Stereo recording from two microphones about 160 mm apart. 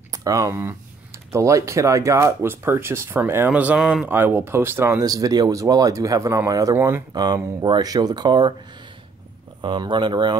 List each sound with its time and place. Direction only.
0.1 s speech: 20° right (ahead or behind)
9.6 s speech: 30° right (ahead or behind)